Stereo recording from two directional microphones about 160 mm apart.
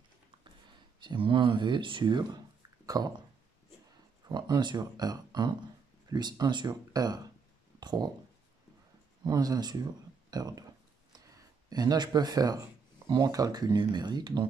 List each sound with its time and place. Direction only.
1.0 s speech: 30° right (ahead or behind)
4.3 s speech: 25° right (ahead or behind)
9.2 s speech: 25° right (ahead or behind)